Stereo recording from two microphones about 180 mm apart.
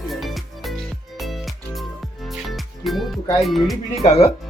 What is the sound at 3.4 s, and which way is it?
Speech, centre (ahead or behind).